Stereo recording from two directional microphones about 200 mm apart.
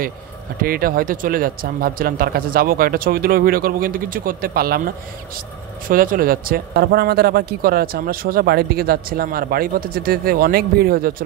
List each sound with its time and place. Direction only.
0.6 s speech: 45° right (ahead or behind)